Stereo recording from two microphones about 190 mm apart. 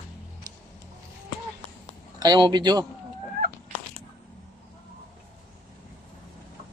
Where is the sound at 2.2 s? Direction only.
20° right (ahead or behind).